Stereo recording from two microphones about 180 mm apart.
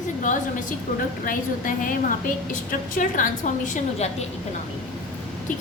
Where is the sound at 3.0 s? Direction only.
45° left (ahead or behind).